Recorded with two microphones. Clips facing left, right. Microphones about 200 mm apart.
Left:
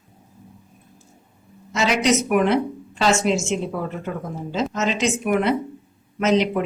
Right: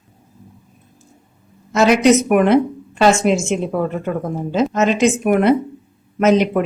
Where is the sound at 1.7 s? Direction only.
50° right (ahead or behind).